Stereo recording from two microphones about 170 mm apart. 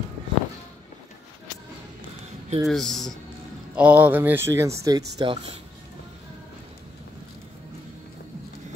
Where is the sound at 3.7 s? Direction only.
10° right (ahead or behind).